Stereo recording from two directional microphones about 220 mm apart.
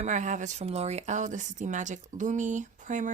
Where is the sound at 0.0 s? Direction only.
35° right (ahead or behind).